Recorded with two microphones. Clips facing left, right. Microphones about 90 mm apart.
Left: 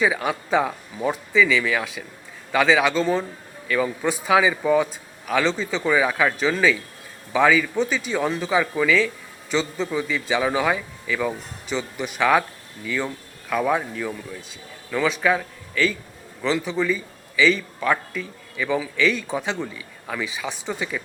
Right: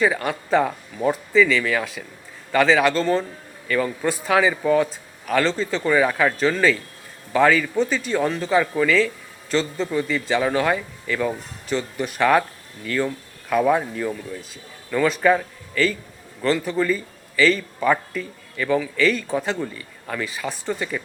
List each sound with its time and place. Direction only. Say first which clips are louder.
0.0 s a man's voice: right 1 dB; 5° left (ahead or behind)